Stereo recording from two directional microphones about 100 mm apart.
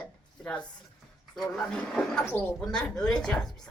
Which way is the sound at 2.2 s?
25° left (ahead or behind).